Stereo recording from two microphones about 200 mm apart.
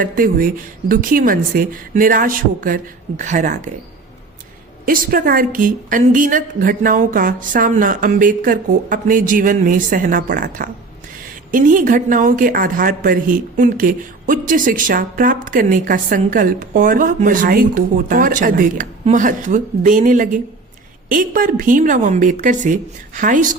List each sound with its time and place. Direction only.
0.0 s a woman's voice: 45° right (ahead or behind)
4.9 s a woman's voice: 45° right (ahead or behind)